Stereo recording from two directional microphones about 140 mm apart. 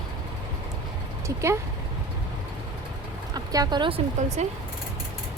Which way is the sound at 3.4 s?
25° right (ahead or behind).